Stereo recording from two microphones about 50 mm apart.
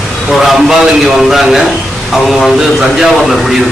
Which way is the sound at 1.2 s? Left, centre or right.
Centre.